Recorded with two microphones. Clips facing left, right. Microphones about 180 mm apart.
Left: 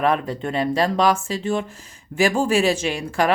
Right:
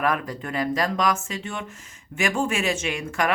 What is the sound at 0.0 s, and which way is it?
A woman's voice, 25° left (ahead or behind).